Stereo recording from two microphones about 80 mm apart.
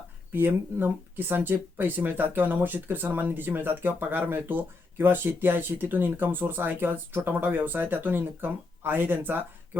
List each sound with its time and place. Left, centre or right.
0.3 s speech: right